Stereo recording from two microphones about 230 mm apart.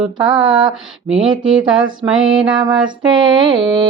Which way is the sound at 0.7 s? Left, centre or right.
Centre.